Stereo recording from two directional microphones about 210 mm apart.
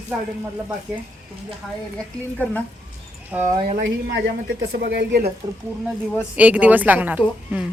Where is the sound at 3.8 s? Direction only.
55° right (ahead or behind).